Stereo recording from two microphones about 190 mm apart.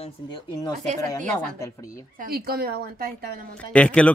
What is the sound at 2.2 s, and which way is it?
A woman's voice, 50° right (ahead or behind).